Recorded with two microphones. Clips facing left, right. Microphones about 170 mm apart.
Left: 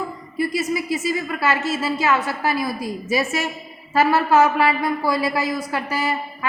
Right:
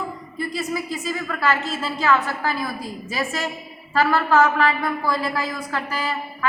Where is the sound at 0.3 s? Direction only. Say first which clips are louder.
Left 4 dB; 10° left (ahead or behind).